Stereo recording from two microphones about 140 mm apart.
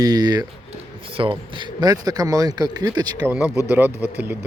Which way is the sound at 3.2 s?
10° right (ahead or behind).